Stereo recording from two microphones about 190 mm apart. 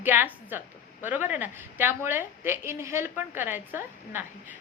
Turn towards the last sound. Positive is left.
turn(degrees=-10)  # may be behind; listen again after turning